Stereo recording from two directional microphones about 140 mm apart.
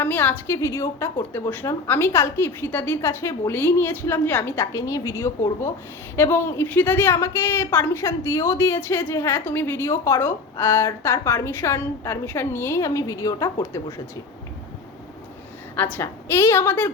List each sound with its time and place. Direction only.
0.0 s a woman's voice: 15° left (ahead or behind)
15.7 s a woman's voice: 15° left (ahead or behind)